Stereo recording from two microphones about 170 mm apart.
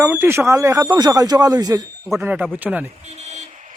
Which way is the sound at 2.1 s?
5° right (ahead or behind).